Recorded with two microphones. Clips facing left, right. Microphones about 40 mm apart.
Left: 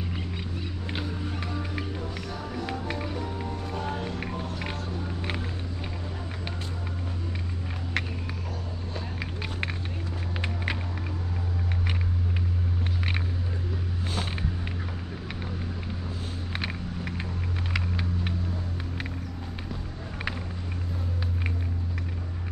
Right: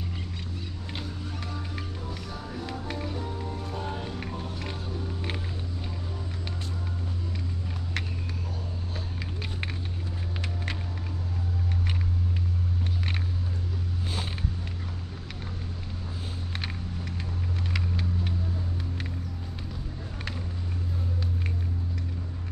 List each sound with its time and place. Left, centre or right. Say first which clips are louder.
0.8 s music: left 5 dB; left
4.3 s run: left 2 dB; left
8.0 s vehicle: left 4 dB; centre
10.4 s vehicle: left 5 dB; centre
14.0 s vehicle: left 3 dB; centre